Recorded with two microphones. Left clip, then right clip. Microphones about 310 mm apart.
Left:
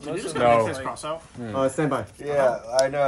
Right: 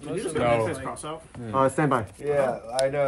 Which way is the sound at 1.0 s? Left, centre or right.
Centre.